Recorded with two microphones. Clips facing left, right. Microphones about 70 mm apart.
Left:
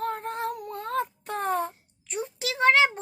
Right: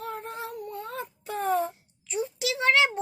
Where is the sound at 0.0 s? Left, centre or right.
Left.